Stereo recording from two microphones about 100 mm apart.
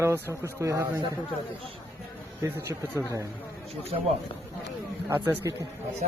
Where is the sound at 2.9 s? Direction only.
30° right (ahead or behind).